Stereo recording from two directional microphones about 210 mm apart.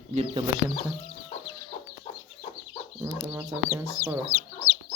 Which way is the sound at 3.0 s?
10° right (ahead or behind).